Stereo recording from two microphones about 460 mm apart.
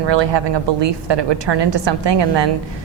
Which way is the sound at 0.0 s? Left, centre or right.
Right.